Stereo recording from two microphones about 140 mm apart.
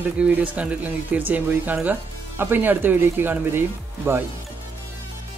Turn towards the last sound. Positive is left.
turn(degrees=-15)  # may be behind; listen again after turning